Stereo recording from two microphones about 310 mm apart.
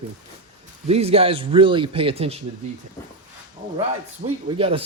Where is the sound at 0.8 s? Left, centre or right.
Centre.